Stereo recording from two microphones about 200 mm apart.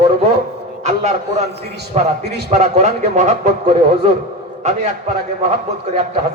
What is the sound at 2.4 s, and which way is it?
Speech, 35° right (ahead or behind).